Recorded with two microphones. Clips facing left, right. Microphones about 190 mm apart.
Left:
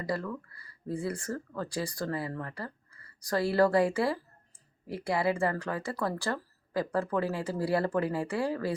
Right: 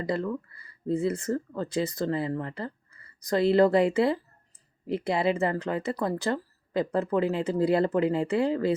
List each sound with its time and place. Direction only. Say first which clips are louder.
0.0 s speech: right 5 dB; 20° right (ahead or behind)